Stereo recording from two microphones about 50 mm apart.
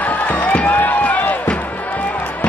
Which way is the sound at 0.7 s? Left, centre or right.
Left.